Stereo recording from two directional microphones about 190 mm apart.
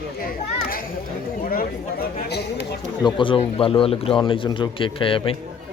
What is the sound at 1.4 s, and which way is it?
Speech, 50° left (ahead or behind).